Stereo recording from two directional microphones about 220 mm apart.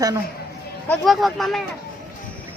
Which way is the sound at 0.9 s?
Centre (ahead or behind).